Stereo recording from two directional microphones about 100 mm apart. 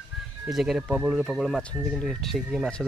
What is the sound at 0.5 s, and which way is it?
Speech, 5° right (ahead or behind).